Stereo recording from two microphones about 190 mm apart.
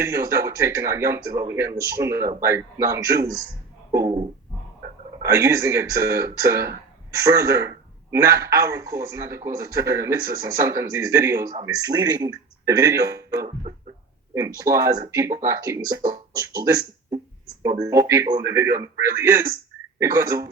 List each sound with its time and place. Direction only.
0.0 s a man's voice: 15° right (ahead or behind)
5.2 s a man's voice: 15° right (ahead or behind)